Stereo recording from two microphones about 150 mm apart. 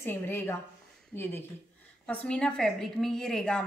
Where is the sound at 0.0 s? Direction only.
15° left (ahead or behind).